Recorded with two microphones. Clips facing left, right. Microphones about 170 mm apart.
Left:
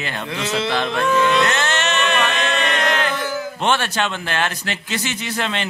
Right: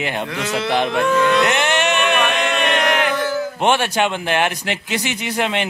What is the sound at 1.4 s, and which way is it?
Chant, 15° right (ahead or behind).